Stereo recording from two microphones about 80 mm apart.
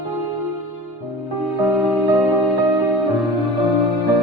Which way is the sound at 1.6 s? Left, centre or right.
Right.